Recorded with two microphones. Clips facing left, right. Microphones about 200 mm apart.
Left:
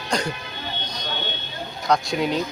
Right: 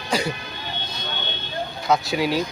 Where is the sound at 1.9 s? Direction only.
5° right (ahead or behind).